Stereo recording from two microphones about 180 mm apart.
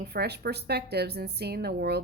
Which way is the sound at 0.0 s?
65° right (ahead or behind).